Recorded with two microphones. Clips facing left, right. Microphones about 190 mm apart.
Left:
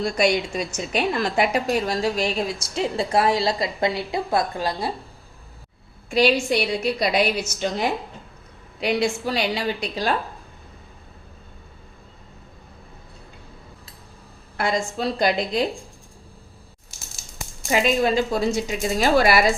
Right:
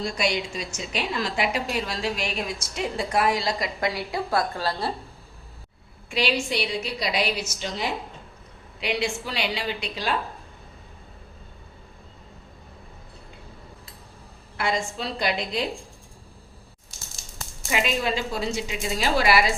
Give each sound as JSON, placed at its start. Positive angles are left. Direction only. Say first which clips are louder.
{"t": 0.0, "sound": "a woman's voice", "louder": "left 6 dB", "side_deg": 50}
{"t": 6.1, "sound": "a woman's voice", "louder": "left 7 dB", "side_deg": 45}
{"t": 14.5, "sound": "a woman's voice", "louder": "left 3 dB", "side_deg": 45}
{"t": 17.7, "sound": "a woman's voice", "louder": "left 6 dB", "side_deg": 40}